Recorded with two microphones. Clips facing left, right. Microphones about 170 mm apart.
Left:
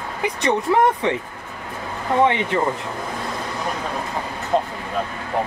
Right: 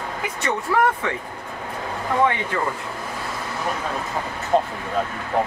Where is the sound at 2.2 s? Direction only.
20° left (ahead or behind).